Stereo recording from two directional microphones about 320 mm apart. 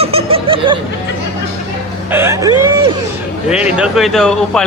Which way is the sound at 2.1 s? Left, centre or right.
Centre.